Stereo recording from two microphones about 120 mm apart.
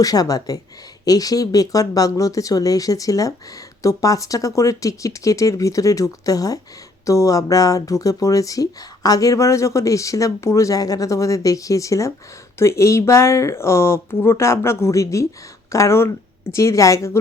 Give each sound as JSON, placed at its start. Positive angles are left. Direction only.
{"t": 0.0, "sound": "a woman's voice", "side_deg": 30}